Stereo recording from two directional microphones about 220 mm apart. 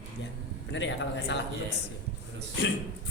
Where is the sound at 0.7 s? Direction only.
55° left (ahead or behind).